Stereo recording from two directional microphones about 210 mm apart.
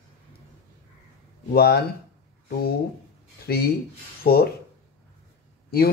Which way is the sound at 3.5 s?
50° left (ahead or behind).